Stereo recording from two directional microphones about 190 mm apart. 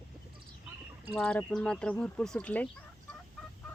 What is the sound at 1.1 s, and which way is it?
Speech, 5° left (ahead or behind).